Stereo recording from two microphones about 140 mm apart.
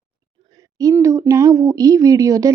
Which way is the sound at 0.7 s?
25° right (ahead or behind).